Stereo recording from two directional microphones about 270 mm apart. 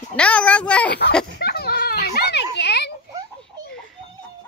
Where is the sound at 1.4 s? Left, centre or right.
Left.